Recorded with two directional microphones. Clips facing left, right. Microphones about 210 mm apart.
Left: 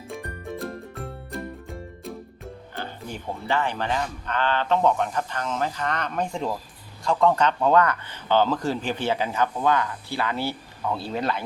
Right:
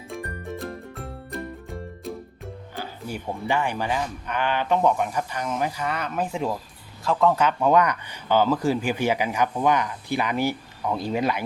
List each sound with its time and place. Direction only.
0.1 s music: centre (ahead or behind)
2.0 s speech: centre (ahead or behind)